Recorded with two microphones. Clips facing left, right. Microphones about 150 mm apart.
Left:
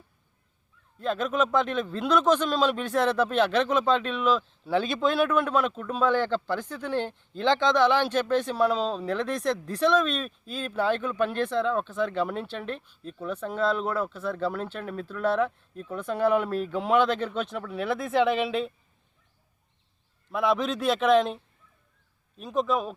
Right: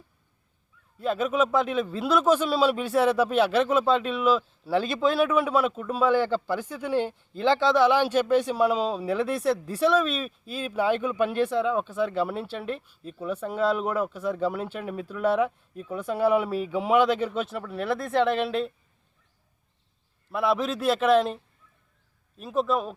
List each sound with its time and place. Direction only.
0.9 s a man's voice: 5° right (ahead or behind)
20.3 s a man's voice: 5° right (ahead or behind)